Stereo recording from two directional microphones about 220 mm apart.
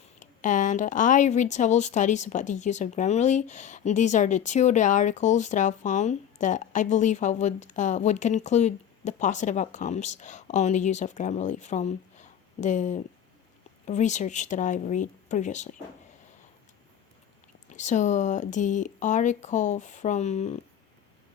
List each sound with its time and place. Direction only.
0.2 s a woman's voice: 35° left (ahead or behind)
17.7 s a woman's voice: 35° left (ahead or behind)